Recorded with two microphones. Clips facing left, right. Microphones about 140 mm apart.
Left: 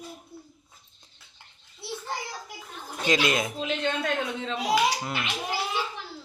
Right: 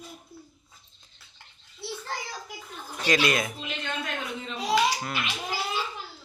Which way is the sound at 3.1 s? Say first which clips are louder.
Even; 20° left (ahead or behind).